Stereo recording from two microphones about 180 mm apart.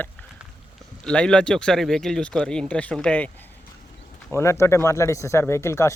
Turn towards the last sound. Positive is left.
turn(degrees=15)  # may be behind; listen again after turning